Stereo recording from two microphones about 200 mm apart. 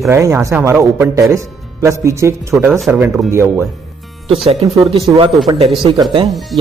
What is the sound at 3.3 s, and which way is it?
Speech, 15° right (ahead or behind).